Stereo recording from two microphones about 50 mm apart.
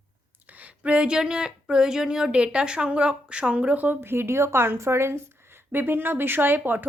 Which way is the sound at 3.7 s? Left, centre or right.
Right.